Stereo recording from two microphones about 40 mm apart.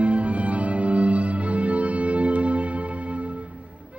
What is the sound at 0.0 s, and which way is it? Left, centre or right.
Music, right.